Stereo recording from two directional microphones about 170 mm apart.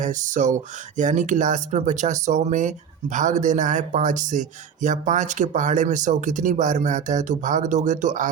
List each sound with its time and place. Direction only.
0.0 s speech: 45° right (ahead or behind)